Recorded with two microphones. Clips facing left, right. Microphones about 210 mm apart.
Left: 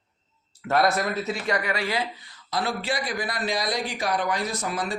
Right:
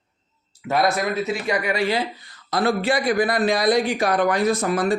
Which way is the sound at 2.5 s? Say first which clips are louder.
Right 7 dB; 55° right (ahead or behind).